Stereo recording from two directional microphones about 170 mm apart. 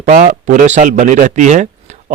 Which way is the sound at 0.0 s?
50° right (ahead or behind).